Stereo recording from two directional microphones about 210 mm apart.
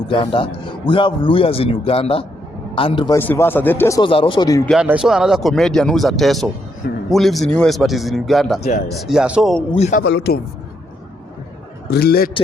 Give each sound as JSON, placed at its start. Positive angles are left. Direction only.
{"t": 0.1, "sound": "a man's voice", "side_deg": 25}
{"t": 3.2, "sound": "speech", "side_deg": 10}
{"t": 4.7, "sound": "speech", "side_deg": -5}
{"t": 9.7, "sound": "speech", "side_deg": 30}
{"t": 10.0, "sound": "a man's voice", "side_deg": 55}
{"t": 11.9, "sound": "a man's voice", "side_deg": 45}